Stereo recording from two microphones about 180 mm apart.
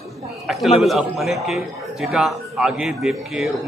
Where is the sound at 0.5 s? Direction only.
Centre (ahead or behind).